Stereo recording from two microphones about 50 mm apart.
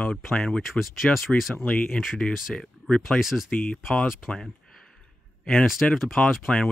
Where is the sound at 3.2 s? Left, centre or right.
Centre.